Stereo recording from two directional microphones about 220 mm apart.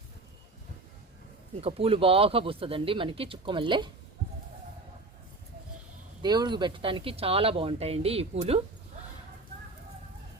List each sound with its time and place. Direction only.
1.6 s speech: 25° right (ahead or behind)
6.2 s speech: 20° right (ahead or behind)